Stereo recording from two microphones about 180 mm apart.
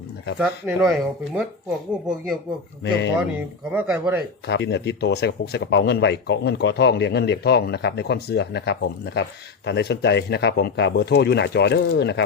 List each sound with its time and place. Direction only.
0.3 s speech: 5° right (ahead or behind)
2.8 s speech: 75° left (ahead or behind)
3.7 s speech: 10° right (ahead or behind)
4.4 s speech: 75° left (ahead or behind)